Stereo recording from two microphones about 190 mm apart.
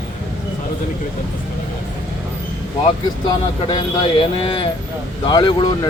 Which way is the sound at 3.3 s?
25° left (ahead or behind).